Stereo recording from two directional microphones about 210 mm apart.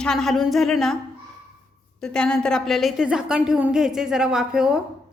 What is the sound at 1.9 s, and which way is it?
A woman's voice, 5° left (ahead or behind).